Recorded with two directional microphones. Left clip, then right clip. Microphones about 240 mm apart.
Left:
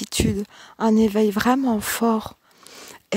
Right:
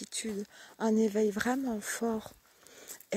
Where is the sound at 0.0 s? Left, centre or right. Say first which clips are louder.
Left 14 dB; left.